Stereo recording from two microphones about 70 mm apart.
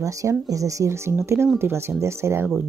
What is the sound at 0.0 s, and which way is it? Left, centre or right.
Speech, right.